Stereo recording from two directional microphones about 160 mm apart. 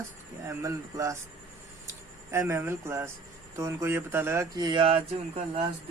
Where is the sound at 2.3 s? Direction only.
15° right (ahead or behind); by 5.6 s 35° right (ahead or behind).